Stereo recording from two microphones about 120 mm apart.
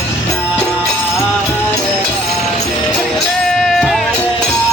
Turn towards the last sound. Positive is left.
turn(degrees=0)  # may be behind; listen again after turning